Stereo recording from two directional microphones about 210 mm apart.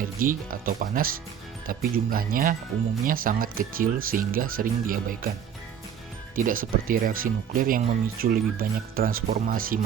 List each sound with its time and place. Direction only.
0.0 s speech: 40° right (ahead or behind)
6.3 s speech: 40° right (ahead or behind)